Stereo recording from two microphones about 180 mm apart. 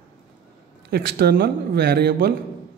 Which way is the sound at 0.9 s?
60° right (ahead or behind).